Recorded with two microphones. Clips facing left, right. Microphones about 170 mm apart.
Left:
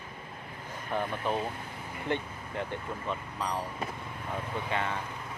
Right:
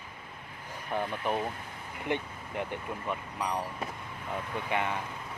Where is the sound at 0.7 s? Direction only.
15° right (ahead or behind).